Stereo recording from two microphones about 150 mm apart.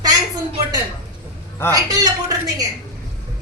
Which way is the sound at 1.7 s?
25° right (ahead or behind).